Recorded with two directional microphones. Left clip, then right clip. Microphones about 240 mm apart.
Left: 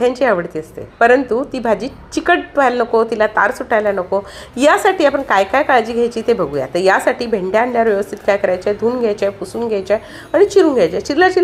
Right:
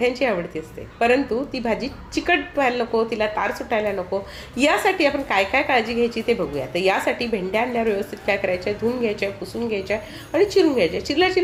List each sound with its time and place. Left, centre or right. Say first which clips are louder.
0.0 s a woman's voice: left 7 dB; centre